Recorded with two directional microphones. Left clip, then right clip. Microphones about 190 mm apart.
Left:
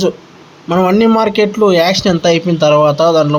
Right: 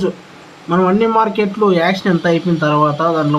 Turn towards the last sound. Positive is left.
turn(degrees=15)  # may be behind; listen again after turning